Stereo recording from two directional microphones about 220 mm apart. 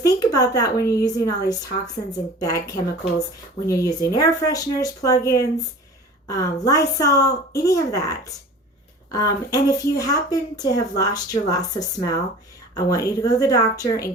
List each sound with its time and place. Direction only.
0.0 s speech: 15° left (ahead or behind)